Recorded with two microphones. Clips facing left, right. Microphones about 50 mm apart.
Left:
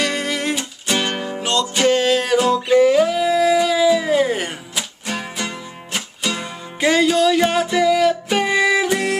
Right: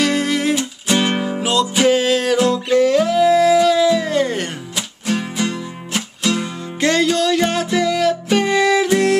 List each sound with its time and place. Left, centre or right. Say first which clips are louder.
0.0 s music: right 4 dB; centre